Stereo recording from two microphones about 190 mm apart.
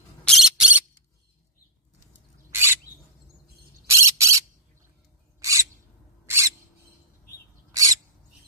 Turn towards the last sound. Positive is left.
turn(degrees=-15)  # may be behind; listen again after turning